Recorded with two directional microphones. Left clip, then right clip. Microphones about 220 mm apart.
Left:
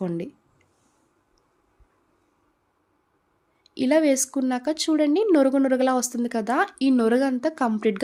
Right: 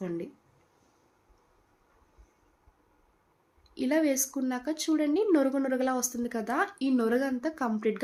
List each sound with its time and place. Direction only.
3.6 s speech: 45° left (ahead or behind)